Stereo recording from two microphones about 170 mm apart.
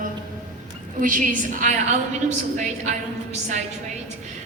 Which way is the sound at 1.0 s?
50° right (ahead or behind).